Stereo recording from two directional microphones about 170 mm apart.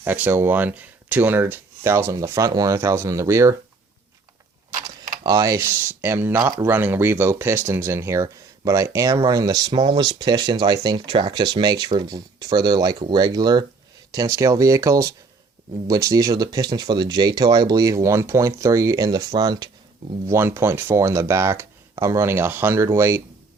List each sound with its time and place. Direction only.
0.0 s speech: 10° right (ahead or behind)
5.2 s speech: 20° right (ahead or behind)